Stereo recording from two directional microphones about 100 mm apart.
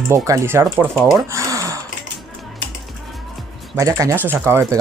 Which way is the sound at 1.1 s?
30° right (ahead or behind).